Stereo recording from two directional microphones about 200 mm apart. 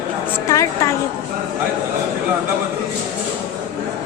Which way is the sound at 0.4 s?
15° left (ahead or behind).